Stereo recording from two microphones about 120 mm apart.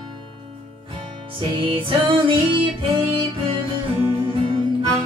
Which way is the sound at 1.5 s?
45° right (ahead or behind).